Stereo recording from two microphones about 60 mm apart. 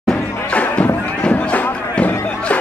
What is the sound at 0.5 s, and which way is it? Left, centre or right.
Music, left.